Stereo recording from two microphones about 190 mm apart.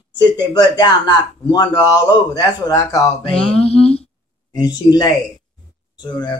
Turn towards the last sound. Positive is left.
turn(degrees=20)  # may be behind; listen again after turning